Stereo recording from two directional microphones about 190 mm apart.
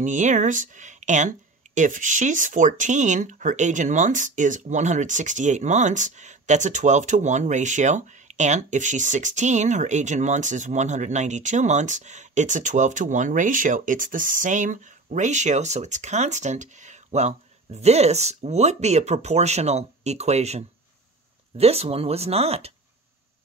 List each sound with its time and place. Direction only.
0.0 s speech: 40° right (ahead or behind)